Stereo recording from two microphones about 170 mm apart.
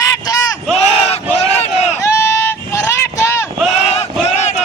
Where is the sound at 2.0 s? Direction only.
15° left (ahead or behind).